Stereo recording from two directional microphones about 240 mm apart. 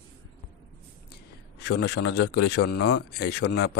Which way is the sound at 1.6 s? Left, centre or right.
Left.